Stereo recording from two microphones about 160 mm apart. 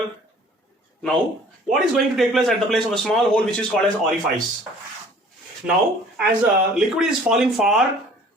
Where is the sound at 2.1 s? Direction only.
Centre (ahead or behind).